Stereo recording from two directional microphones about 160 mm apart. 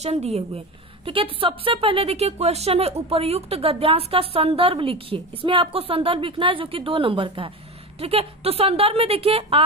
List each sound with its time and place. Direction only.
0.0 s a woman's voice: 40° right (ahead or behind)